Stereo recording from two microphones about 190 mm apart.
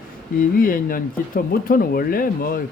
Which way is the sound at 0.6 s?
50° left (ahead or behind).